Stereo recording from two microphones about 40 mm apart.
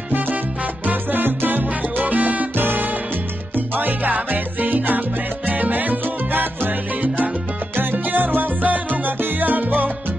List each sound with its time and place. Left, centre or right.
0.8 s salsa music: right
2.5 s music: right
3.5 s salsa music: right
5.5 s music: right
7.7 s salsa music: right